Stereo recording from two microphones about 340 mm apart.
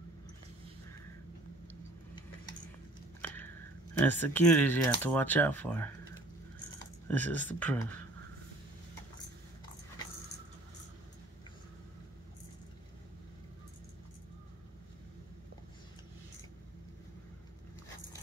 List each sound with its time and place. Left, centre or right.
3.2 s a sound: centre
4.0 s speech: centre
7.1 s speech: centre